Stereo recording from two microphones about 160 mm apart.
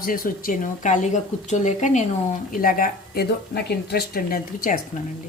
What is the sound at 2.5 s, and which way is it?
Speech, 60° left (ahead or behind).